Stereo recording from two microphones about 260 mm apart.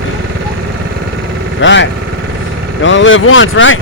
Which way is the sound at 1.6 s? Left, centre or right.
Left.